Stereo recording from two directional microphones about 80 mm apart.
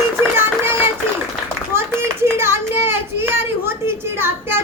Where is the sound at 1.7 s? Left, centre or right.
Right.